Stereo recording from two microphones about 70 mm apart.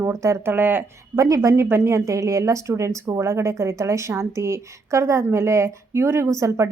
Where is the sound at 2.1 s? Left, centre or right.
Right.